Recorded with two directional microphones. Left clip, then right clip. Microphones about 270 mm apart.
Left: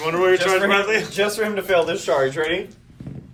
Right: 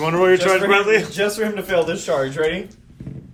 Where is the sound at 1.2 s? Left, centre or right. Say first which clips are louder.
Even; left.